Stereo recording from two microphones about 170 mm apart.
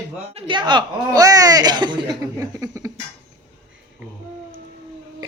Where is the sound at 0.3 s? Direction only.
30° right (ahead or behind).